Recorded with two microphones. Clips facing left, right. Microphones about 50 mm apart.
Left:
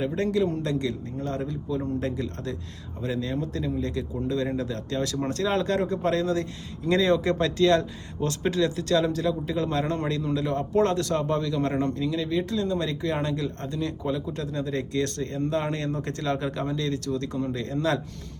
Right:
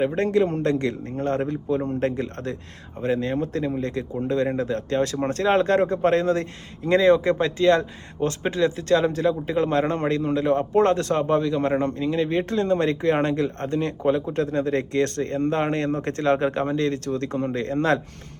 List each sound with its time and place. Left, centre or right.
0.0 s speech: right